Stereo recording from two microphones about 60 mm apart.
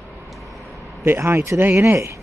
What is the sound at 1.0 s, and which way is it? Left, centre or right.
Speech, right.